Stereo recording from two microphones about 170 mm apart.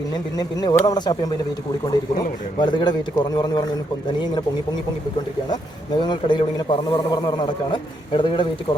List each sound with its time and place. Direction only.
0.3 s a man's voice: 25° left (ahead or behind)
6.0 s a man's voice: 25° left (ahead or behind)